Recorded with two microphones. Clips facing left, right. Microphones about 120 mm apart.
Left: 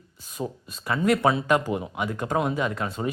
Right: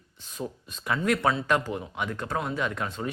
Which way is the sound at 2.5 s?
5° left (ahead or behind).